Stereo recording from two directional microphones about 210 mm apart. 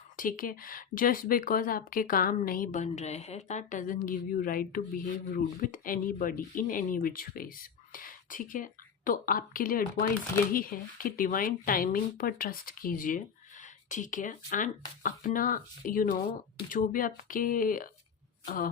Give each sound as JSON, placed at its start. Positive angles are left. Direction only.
{"t": 0.2, "sound": "speech", "side_deg": 40}